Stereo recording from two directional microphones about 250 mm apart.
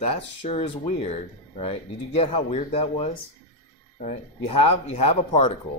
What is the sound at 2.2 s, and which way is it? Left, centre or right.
Speech, left.